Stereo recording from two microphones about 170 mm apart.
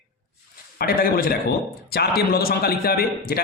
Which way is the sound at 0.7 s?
60° left (ahead or behind).